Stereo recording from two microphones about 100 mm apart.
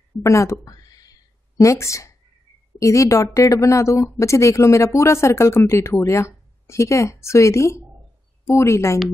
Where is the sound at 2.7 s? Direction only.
30° left (ahead or behind).